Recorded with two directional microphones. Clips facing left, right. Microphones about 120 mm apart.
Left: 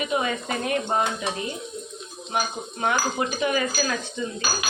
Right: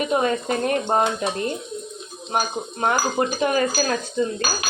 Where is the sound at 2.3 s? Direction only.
40° right (ahead or behind).